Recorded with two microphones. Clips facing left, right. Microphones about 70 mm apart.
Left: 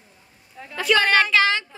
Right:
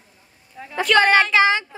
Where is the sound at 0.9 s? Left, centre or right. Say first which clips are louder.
Right 4 dB; right.